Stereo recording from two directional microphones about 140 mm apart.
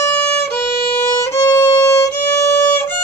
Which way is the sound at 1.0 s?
20° left (ahead or behind).